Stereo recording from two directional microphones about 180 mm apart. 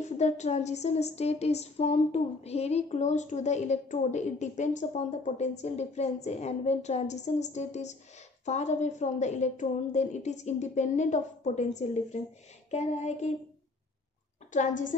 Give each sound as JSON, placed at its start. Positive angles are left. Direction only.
{"t": 0.0, "sound": "a woman's voice", "side_deg": 40}
{"t": 14.5, "sound": "a woman's voice", "side_deg": 45}